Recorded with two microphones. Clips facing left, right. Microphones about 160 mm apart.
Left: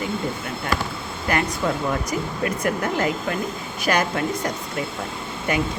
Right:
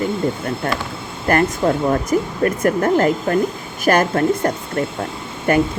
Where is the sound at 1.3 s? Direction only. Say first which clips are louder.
Right 7 dB; 50° right (ahead or behind).